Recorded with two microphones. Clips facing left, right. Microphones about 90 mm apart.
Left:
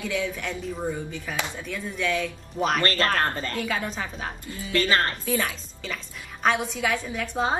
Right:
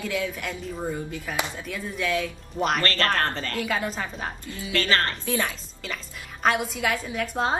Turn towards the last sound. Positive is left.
turn(degrees=0)  # may be behind; listen again after turning